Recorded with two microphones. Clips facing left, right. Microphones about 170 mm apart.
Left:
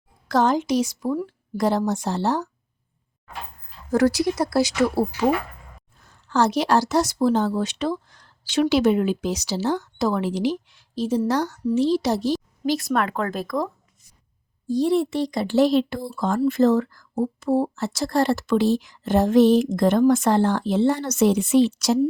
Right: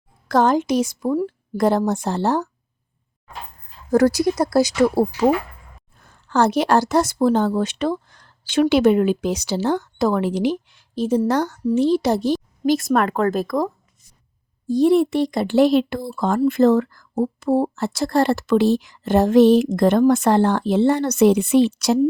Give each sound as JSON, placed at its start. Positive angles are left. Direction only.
{"t": 0.3, "sound": "a woman's voice", "side_deg": -50}
{"t": 1.1, "sound": "speech", "side_deg": -35}
{"t": 1.5, "sound": "a woman's voice", "side_deg": -55}
{"t": 3.9, "sound": "a woman's voice", "side_deg": -40}
{"t": 6.0, "sound": "a woman's voice", "side_deg": -55}
{"t": 14.7, "sound": "speech", "side_deg": -55}